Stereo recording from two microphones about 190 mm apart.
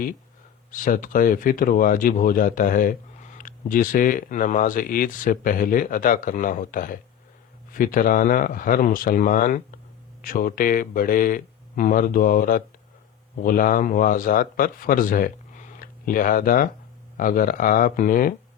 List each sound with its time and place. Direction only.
0.7 s a man's voice: 45° left (ahead or behind)